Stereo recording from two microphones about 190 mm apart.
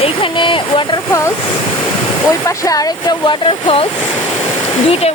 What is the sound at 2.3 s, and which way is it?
Speech, 15° left (ahead or behind).